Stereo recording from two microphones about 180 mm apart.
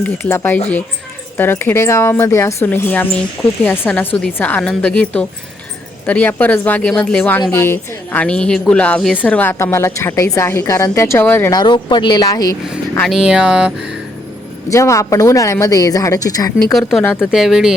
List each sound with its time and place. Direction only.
0.0 s speech: 15° left (ahead or behind)
11.6 s speech: 25° left (ahead or behind)
13.0 s speech: centre (ahead or behind)
14.7 s speech: 15° left (ahead or behind)
17.3 s speech: centre (ahead or behind)